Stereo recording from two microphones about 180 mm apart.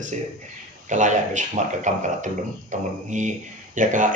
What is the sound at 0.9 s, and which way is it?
A man's voice, 40° right (ahead or behind).